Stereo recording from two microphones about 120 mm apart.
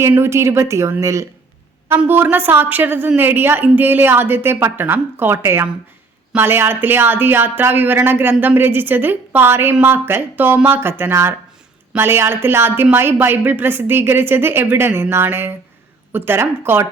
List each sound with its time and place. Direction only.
0.1 s a woman's voice: 20° right (ahead or behind)